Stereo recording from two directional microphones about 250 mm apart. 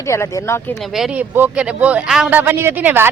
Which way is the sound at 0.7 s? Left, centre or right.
Centre.